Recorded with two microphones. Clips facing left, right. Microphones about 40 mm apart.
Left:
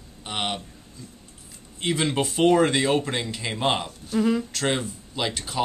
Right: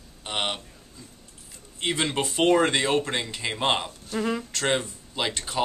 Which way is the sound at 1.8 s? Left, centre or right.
Centre.